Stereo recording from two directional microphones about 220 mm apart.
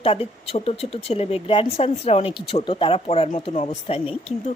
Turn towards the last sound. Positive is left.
turn(degrees=25)  # may be behind; listen again after turning